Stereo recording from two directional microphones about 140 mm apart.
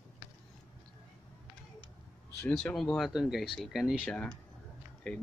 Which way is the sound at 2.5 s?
5° left (ahead or behind).